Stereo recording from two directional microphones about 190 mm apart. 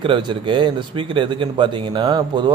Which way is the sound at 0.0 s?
25° right (ahead or behind).